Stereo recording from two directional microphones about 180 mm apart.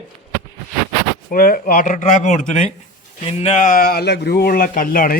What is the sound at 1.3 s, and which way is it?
Speech, 55° left (ahead or behind).